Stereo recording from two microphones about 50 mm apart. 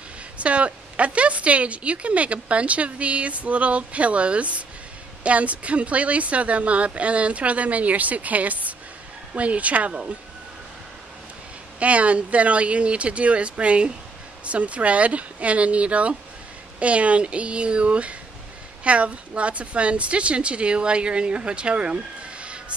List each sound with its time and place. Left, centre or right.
0.4 s speech: right
11.8 s speech: right
22.4 s a sound: right